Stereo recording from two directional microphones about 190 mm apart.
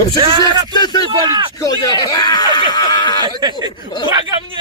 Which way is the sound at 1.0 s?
25° right (ahead or behind).